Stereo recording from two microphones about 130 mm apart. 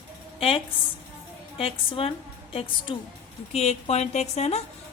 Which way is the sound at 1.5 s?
45° left (ahead or behind).